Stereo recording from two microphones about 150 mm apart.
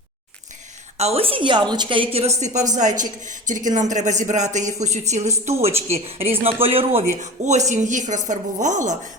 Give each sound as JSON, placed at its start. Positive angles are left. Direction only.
{"t": 0.9, "sound": "a woman's voice", "side_deg": -45}
{"t": 2.1, "sound": "a woman's voice", "side_deg": -50}
{"t": 7.1, "sound": "speech", "side_deg": -55}